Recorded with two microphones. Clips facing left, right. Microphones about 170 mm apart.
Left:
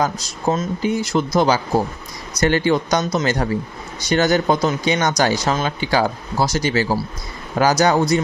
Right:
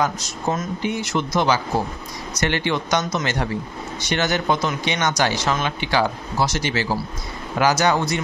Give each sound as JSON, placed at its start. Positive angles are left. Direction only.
{"t": 0.0, "sound": "speech", "side_deg": 30}